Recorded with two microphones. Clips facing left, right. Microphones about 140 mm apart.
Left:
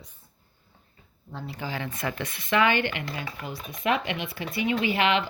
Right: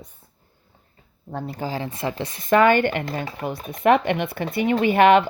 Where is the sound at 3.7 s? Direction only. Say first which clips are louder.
Right 9 dB; 55° right (ahead or behind).